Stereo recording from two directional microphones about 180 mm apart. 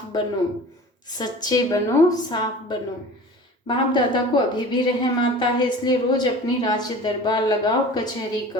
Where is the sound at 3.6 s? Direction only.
25° left (ahead or behind).